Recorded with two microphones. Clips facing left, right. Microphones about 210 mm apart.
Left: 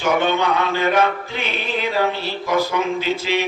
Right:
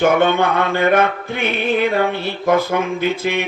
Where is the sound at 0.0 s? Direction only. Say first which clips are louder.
Right 4 dB; 55° right (ahead or behind).